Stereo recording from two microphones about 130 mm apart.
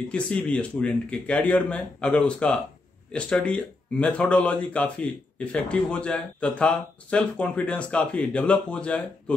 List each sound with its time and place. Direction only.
0.1 s speech: 10° left (ahead or behind)